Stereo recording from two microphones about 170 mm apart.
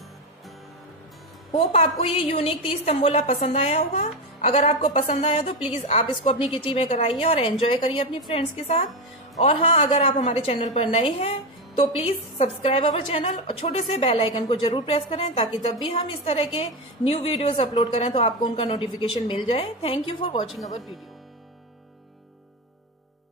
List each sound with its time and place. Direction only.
1.5 s a woman's voice: 40° left (ahead or behind)
15.9 s a woman's voice: 35° left (ahead or behind)